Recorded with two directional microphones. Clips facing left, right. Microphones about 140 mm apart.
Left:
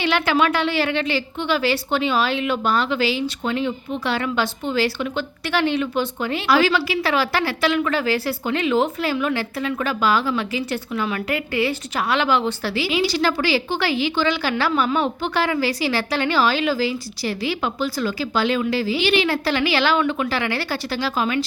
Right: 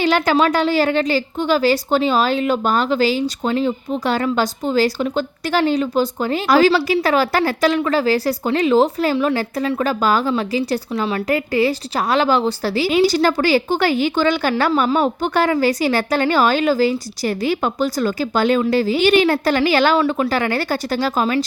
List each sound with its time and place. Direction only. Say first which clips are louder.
0.0 s a woman's voice: right 4 dB; 40° right (ahead or behind)